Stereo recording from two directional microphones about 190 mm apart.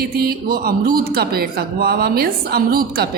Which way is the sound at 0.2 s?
50° right (ahead or behind).